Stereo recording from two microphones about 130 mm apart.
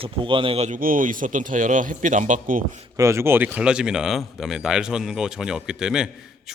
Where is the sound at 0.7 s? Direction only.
90° right; by 2.6 s 75° right (ahead or behind).